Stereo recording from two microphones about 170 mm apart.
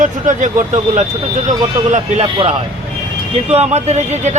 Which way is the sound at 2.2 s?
30° right (ahead or behind).